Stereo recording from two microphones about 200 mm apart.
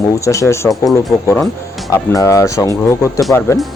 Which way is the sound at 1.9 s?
15° left (ahead or behind).